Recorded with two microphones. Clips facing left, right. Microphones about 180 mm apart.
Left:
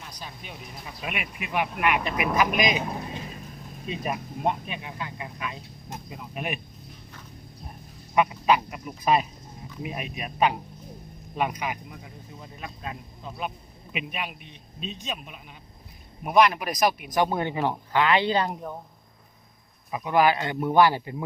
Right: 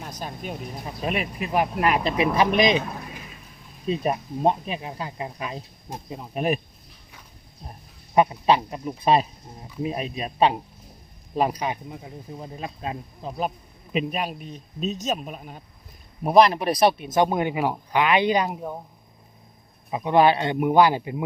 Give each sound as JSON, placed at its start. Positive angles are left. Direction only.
{"t": 0.0, "sound": "speech", "side_deg": -50}
{"t": 3.8, "sound": "speech", "side_deg": -35}
{"t": 8.1, "sound": "a man's voice", "side_deg": -35}
{"t": 17.2, "sound": "speech", "side_deg": -15}
{"t": 19.9, "sound": "a man's voice", "side_deg": -25}